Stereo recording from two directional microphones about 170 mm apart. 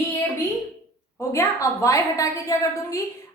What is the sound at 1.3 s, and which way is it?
A woman's voice, 20° left (ahead or behind).